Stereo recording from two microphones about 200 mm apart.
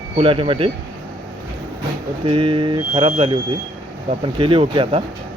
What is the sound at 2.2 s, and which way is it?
Speech, 25° right (ahead or behind).